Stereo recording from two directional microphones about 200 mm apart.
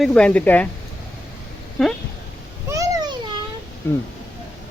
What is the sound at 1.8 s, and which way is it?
Speech, centre (ahead or behind).